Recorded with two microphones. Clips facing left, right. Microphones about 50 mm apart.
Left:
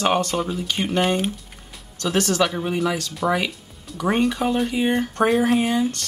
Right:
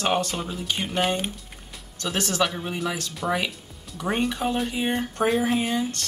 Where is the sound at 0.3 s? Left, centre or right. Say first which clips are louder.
Left 5 dB; centre.